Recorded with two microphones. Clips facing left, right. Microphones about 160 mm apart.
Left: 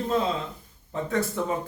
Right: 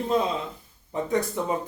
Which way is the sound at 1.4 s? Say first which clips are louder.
Right 1 dB; 15° right (ahead or behind).